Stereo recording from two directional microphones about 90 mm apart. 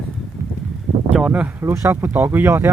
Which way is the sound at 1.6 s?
30° right (ahead or behind).